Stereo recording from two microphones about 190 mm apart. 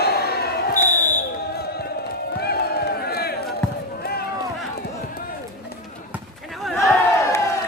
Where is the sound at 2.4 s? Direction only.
55° left (ahead or behind).